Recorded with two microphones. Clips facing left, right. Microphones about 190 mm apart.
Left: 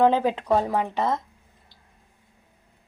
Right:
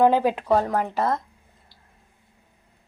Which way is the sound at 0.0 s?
10° right (ahead or behind).